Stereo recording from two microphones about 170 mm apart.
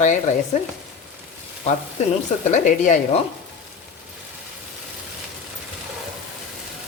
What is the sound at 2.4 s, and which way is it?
Speech, 45° left (ahead or behind).